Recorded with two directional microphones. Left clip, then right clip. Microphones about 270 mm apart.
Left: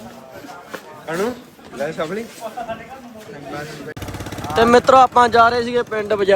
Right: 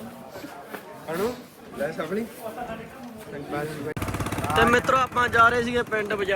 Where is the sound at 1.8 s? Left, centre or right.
Left.